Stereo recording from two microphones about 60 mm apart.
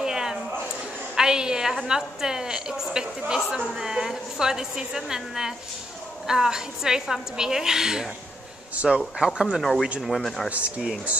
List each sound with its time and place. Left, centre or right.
0.0 s a sound: centre
1.1 s a woman's voice: centre
9.6 s speech: centre
10.5 s speech: right